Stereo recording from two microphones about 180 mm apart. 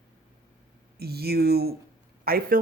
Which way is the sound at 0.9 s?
60° right (ahead or behind).